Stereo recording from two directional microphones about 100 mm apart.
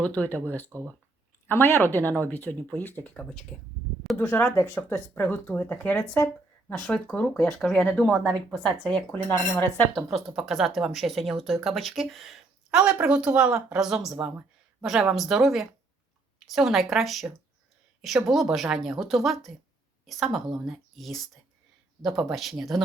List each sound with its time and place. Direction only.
0.0 s speech: 15° left (ahead or behind)
0.7 s speech: 25° right (ahead or behind)
1.5 s speech: 20° left (ahead or behind)
4.2 s speech: 20° left (ahead or behind)
9.9 s speech: centre (ahead or behind)
22.0 s speech: 5° right (ahead or behind)